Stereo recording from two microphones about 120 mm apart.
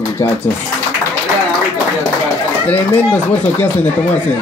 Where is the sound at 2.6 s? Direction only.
15° left (ahead or behind).